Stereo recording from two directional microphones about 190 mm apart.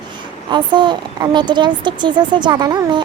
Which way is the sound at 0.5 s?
25° right (ahead or behind).